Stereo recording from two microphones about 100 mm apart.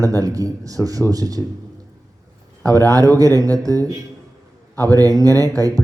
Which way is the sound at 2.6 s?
35° right (ahead or behind).